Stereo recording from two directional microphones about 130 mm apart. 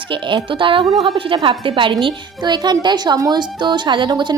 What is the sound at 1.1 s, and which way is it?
A woman's voice, 40° right (ahead or behind).